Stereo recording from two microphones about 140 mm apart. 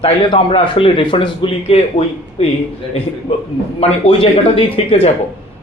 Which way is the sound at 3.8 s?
45° left (ahead or behind).